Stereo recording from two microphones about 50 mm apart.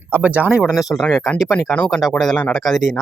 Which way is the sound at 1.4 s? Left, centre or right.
Centre.